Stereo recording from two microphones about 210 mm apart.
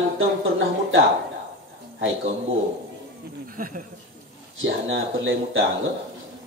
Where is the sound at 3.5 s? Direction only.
40° right (ahead or behind).